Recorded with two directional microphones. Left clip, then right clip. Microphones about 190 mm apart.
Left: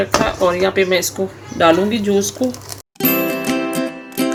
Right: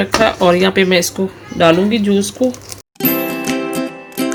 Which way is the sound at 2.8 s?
Centre (ahead or behind).